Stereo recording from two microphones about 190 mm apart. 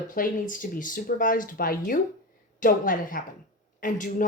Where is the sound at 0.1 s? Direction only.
45° left (ahead or behind).